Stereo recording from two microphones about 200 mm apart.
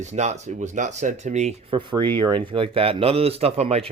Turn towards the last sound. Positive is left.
turn(degrees=-30)  # may be behind; listen again after turning